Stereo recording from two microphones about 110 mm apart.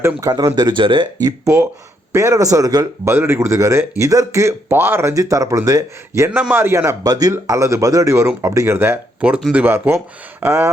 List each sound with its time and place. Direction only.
0.2 s speech: 35° right (ahead or behind)
2.1 s speech: 30° right (ahead or behind)
7.0 s speech: 35° right (ahead or behind); by 10.0 s 20° right (ahead or behind)